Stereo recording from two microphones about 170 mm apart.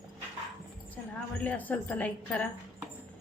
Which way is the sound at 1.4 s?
10° left (ahead or behind).